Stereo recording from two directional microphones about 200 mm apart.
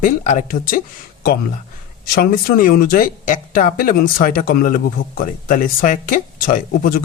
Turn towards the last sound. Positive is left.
turn(degrees=45)  # may be behind; listen again after turning